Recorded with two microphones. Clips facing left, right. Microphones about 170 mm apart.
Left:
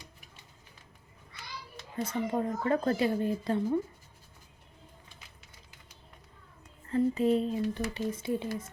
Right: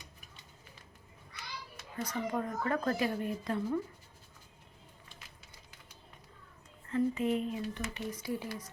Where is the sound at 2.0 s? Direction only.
25° left (ahead or behind).